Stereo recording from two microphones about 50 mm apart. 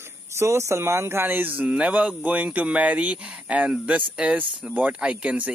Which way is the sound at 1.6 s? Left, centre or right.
Centre.